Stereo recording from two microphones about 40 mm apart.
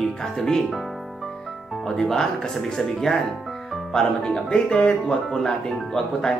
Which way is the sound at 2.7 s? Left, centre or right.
Centre.